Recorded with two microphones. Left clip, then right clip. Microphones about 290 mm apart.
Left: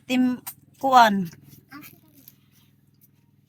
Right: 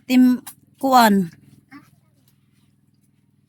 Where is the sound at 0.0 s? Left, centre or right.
Centre.